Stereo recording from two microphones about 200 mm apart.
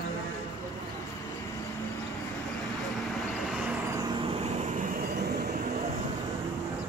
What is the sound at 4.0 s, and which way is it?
Vehicle, 25° right (ahead or behind).